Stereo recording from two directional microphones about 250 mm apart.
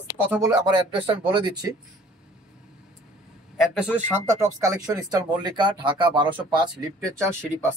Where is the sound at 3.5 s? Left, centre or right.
Centre.